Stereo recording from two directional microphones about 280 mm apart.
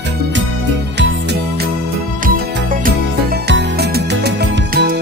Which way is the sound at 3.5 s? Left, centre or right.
Right.